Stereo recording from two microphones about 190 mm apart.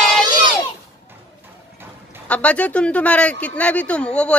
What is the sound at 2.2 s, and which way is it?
Speech, 5° left (ahead or behind).